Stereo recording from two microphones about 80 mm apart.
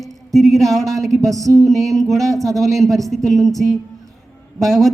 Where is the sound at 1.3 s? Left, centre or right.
Right.